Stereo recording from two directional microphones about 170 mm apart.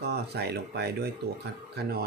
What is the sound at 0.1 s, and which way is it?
Speech, 70° right (ahead or behind).